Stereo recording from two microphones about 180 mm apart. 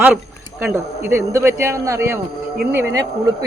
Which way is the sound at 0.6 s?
15° right (ahead or behind).